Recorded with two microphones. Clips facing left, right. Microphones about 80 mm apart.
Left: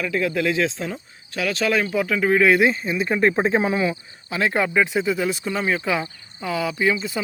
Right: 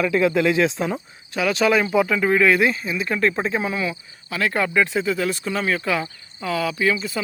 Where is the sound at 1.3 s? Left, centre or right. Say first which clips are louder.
Right 3 dB; centre.